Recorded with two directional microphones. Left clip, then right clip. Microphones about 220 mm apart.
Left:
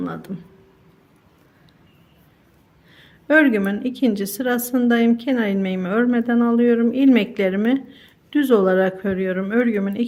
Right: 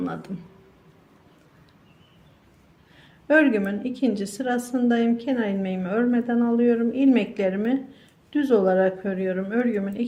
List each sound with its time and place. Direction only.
0.0 s speech: 15° left (ahead or behind)
2.9 s a woman's voice: 20° left (ahead or behind)